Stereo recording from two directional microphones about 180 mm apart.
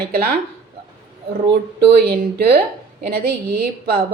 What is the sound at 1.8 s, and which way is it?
A woman's voice, 60° right (ahead or behind).